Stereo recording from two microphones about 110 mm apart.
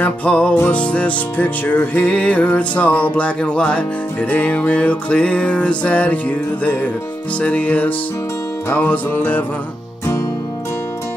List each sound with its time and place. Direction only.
0.0 s music: 15° left (ahead or behind)